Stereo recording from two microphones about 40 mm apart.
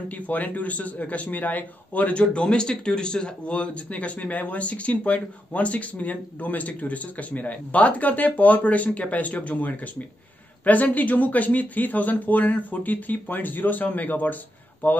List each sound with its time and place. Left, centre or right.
0.3 s a man's voice: left